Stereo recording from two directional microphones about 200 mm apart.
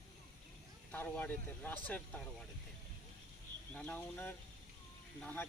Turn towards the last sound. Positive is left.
turn(degrees=10)  # may be behind; listen again after turning